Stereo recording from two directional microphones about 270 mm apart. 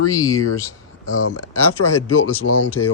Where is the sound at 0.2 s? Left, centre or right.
Centre.